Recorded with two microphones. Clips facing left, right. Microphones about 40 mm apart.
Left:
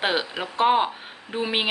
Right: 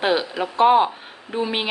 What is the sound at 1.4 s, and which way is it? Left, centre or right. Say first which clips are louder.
Speech: left 1 dB; centre.